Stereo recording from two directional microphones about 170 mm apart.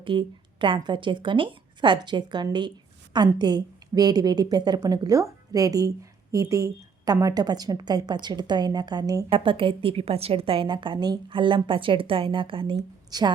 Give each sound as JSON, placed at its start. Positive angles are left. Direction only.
{"t": 0.0, "sound": "a woman's voice", "side_deg": -30}